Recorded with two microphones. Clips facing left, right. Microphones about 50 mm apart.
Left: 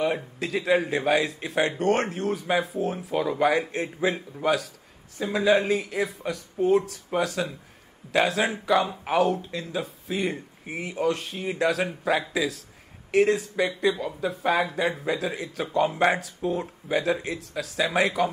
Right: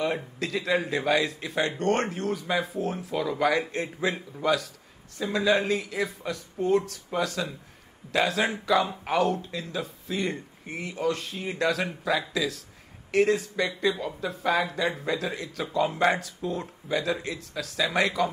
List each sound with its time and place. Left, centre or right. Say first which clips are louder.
0.0 s a man's voice: left 2 dB; centre
0.5 s a man's voice: left 4 dB; centre
1.6 s speech: left 2 dB; centre
2.2 s a man's voice: left 3 dB; left
2.7 s speech: left 2 dB; centre
3.2 s a man's voice: left 3 dB; left
3.5 s speech: left 1 dB; centre
7.1 s speech: left 2 dB; left
8.1 s speech: left 2 dB; centre
12.0 s speech: left 2 dB; left
12.3 s a man's voice: left 2 dB; centre
13.1 s speech: left 2 dB; centre
14.4 s a man's voice: left 1 dB; centre
14.9 s speech: left 2 dB; centre